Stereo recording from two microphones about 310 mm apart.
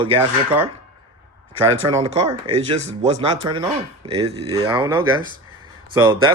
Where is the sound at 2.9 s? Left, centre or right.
Centre.